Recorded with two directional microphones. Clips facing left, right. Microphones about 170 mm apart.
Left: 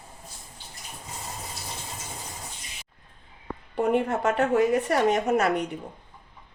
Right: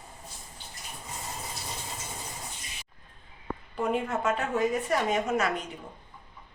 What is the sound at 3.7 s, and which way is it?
Speech, 65° left (ahead or behind).